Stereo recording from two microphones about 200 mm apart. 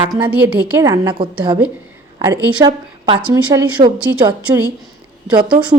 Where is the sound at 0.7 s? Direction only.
20° right (ahead or behind).